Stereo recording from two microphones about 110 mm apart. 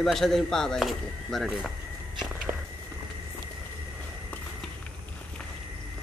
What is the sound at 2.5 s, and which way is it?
Walk, 30° right (ahead or behind).